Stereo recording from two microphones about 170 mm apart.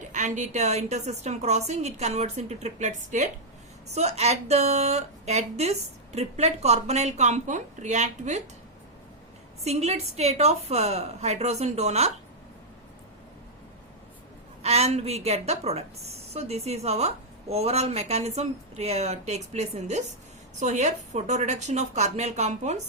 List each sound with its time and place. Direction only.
0.1 s speech: 45° right (ahead or behind)
9.6 s speech: 40° right (ahead or behind)
14.6 s speech: 40° right (ahead or behind)